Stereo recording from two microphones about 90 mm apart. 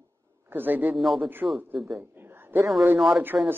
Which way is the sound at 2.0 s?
25° right (ahead or behind).